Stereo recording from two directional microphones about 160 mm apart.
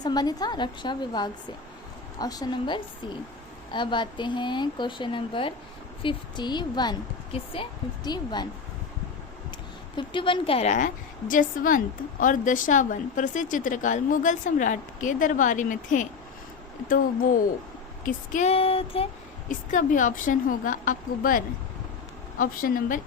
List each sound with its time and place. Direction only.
0.0 s speech: 25° left (ahead or behind)
9.9 s a woman's voice: 30° left (ahead or behind); by 16.0 s 55° left (ahead or behind)
18.0 s a woman's voice: 45° left (ahead or behind)
19.5 s a woman's voice: 55° left (ahead or behind)